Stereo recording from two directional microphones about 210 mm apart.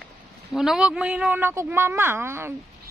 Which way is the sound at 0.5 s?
5° right (ahead or behind).